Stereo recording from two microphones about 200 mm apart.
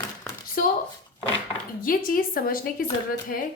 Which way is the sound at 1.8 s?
45° left (ahead or behind).